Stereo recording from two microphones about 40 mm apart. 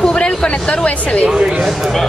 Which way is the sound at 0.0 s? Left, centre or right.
Left.